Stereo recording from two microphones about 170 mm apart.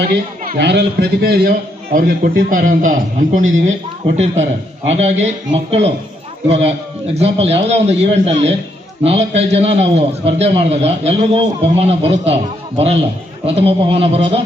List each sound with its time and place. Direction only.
0.1 s a man's voice: 75° right (ahead or behind); by 5.3 s 40° right (ahead or behind)
6.7 s a man's voice: 40° right (ahead or behind)